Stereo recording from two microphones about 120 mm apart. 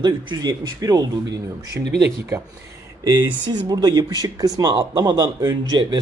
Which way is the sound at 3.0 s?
35° right (ahead or behind).